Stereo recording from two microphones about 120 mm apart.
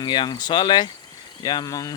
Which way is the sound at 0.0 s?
40° left (ahead or behind).